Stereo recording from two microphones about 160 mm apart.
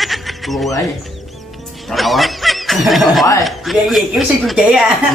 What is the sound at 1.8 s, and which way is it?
Speech, centre (ahead or behind).